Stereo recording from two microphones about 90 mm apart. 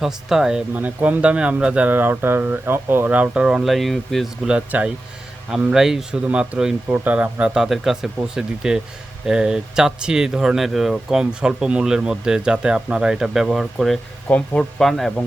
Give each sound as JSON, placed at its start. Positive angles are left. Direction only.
{"t": 0.0, "sound": "speech", "side_deg": -5}
{"t": 0.7, "sound": "speech", "side_deg": -15}
{"t": 4.4, "sound": "speech", "side_deg": -15}
{"t": 6.8, "sound": "speech", "side_deg": -20}
{"t": 14.3, "sound": "speech", "side_deg": 15}